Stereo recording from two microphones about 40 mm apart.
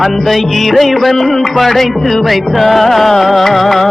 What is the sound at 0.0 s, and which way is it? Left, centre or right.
Music, centre.